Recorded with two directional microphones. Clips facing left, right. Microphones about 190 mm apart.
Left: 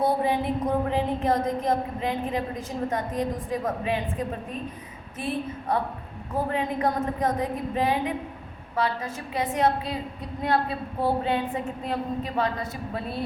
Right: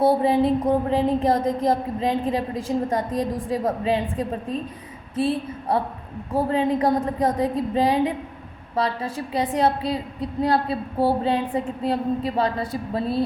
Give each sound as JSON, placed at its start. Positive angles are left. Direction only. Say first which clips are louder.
{"t": 0.0, "sound": "a woman's voice", "louder": "right 6 dB", "side_deg": -30}
{"t": 5.1, "sound": "a woman's voice", "louder": "right 7 dB", "side_deg": -30}